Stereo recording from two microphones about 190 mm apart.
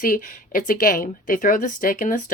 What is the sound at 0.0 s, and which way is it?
A woman's voice, 45° left (ahead or behind).